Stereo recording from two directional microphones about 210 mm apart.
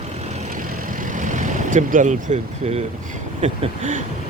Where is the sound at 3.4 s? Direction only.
35° right (ahead or behind).